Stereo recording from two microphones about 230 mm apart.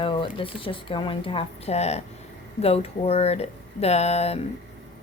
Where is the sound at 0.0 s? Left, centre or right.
Left.